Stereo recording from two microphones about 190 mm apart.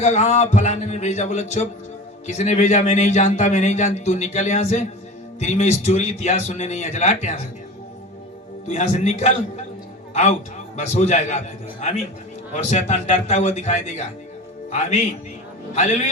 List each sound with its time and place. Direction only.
0.0 s a man's voice: 35° left (ahead or behind)
8.6 s a man's voice: 40° left (ahead or behind)
10.8 s a man's voice: 40° left (ahead or behind)